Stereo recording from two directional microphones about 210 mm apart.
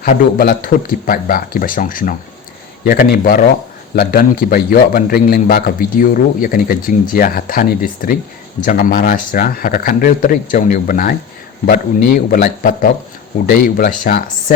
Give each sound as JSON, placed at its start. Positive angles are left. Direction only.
{"t": 0.0, "sound": "a man's voice", "side_deg": 45}